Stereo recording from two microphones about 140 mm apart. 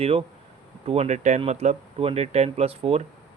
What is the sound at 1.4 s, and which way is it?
Speech, 50° right (ahead or behind).